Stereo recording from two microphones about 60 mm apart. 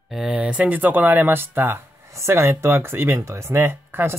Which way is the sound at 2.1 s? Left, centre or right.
Right.